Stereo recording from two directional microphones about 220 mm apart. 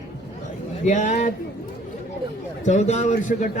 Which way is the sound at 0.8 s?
35° left (ahead or behind).